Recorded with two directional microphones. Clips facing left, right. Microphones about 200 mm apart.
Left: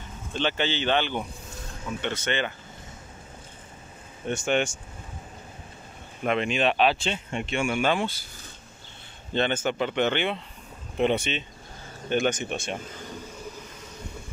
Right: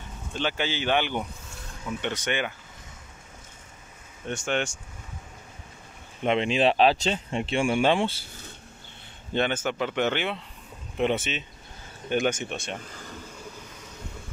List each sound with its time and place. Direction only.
0.4 s speech: 10° right (ahead or behind)
4.3 s speech: 5° left (ahead or behind)
6.2 s speech: 25° right (ahead or behind)
9.3 s speech: 5° right (ahead or behind)